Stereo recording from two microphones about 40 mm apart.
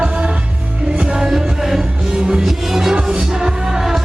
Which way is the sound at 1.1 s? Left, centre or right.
Centre.